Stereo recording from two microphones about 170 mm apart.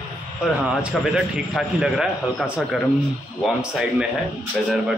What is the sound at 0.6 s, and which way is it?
A man's voice, 5° right (ahead or behind).